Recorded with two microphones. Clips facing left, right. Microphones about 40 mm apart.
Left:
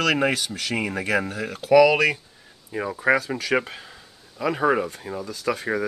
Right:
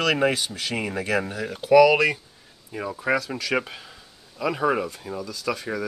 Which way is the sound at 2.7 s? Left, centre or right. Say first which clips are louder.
Left 3 dB; centre.